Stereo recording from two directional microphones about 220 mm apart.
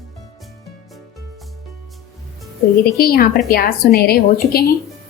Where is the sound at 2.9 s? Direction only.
45° left (ahead or behind).